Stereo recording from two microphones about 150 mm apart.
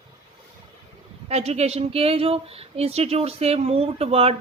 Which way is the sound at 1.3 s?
45° right (ahead or behind).